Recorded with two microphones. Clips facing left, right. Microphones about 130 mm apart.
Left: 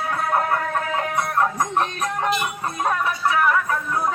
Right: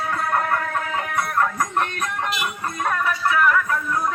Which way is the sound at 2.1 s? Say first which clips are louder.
Left 3 dB; 30° left (ahead or behind).